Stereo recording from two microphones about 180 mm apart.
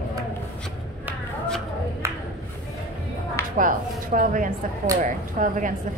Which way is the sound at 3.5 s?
50° right (ahead or behind).